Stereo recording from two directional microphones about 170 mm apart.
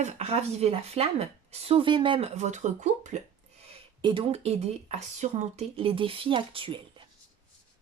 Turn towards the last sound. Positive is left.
turn(degrees=-30)  # may be behind; listen again after turning